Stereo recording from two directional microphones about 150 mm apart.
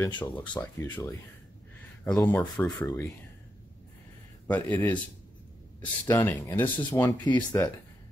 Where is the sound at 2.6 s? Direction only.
15° left (ahead or behind).